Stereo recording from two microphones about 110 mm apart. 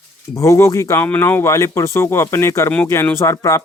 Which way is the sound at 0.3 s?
25° left (ahead or behind).